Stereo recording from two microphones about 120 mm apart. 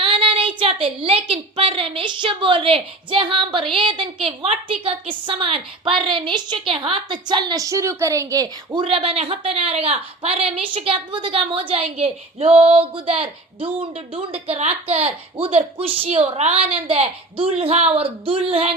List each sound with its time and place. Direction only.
0.0 s a woman's voice: 50° right (ahead or behind); by 8.8 s 30° right (ahead or behind)
8.8 s a woman's voice: 50° right (ahead or behind)